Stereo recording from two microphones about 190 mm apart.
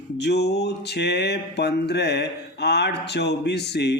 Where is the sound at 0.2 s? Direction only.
60° left (ahead or behind).